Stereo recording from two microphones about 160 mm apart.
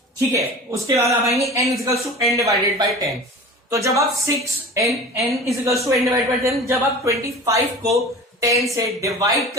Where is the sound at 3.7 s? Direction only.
20° right (ahead or behind).